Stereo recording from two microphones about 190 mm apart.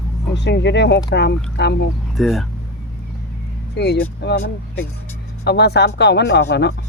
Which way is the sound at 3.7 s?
60° left (ahead or behind).